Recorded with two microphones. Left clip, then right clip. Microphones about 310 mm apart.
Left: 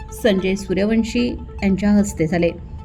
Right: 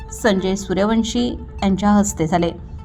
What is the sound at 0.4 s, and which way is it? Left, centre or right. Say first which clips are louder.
Speech: even; right.